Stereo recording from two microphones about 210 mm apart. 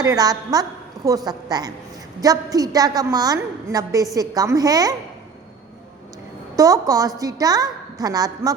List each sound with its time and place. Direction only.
0.0 s a woman's voice: 15° right (ahead or behind)
6.6 s a woman's voice: 15° right (ahead or behind)